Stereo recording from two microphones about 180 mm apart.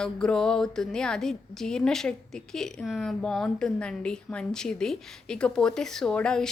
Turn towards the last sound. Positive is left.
turn(degrees=5)  # may be behind; listen again after turning